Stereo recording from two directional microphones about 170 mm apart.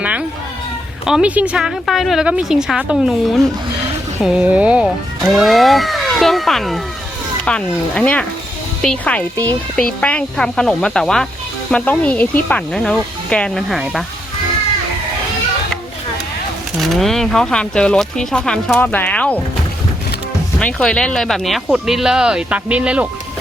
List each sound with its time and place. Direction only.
0.0 s speech: 10° right (ahead or behind)
16.7 s speech: centre (ahead or behind)
20.6 s speech: 5° left (ahead or behind)